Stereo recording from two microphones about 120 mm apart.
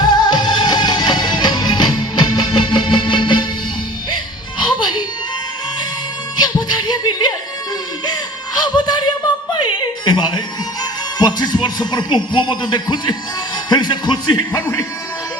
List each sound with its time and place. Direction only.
0.0 s music: 35° left (ahead or behind)
4.6 s music: 40° left (ahead or behind)
6.3 s music: 35° left (ahead or behind)
11.2 s speech: 35° left (ahead or behind)
13.7 s music: 35° left (ahead or behind)